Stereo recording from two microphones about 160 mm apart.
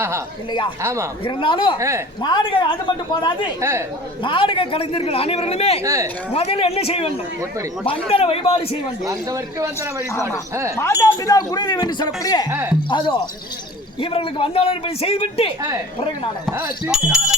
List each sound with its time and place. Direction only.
0.8 s speech: 15° right (ahead or behind)
1.2 s speech: 30° left (ahead or behind)
3.6 s speech: 15° right (ahead or behind)
4.2 s speech: 30° left (ahead or behind)
5.8 s speech: 20° right (ahead or behind)
6.3 s speech: 40° left (ahead or behind)
8.1 s speech: 35° left (ahead or behind)
9.0 s speech: 20° right (ahead or behind)
10.8 s speech: 15° left (ahead or behind)
12.5 s speech: 15° right (ahead or behind)
12.9 s speech: 30° left (ahead or behind)
16.9 s music: 5° right (ahead or behind)